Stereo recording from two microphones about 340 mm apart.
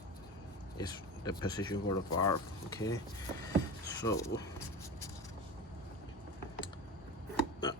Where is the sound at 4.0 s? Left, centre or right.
Centre.